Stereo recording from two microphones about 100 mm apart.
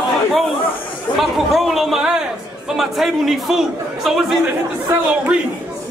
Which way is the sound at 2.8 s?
Centre (ahead or behind).